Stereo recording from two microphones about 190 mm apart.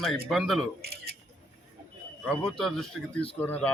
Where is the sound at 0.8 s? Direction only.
55° right (ahead or behind).